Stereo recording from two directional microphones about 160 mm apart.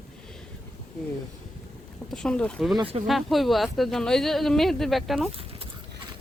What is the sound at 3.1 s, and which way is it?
Speech, centre (ahead or behind).